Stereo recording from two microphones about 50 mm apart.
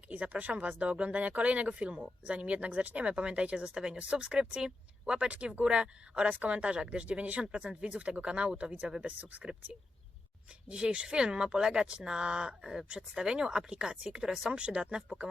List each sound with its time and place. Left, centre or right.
0.1 s speech: right
10.7 s speech: centre